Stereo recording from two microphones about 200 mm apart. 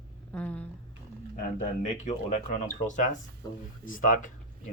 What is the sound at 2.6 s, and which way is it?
Speech, 40° left (ahead or behind).